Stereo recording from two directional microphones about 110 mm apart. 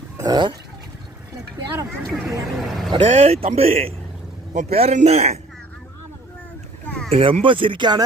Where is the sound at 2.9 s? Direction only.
60° right (ahead or behind); by 5.4 s 80° right.